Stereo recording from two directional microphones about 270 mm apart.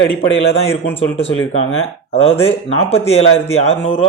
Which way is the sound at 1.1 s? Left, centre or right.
Left.